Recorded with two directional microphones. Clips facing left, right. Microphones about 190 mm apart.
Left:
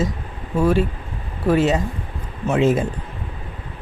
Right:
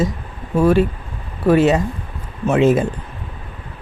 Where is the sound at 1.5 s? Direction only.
65° right (ahead or behind).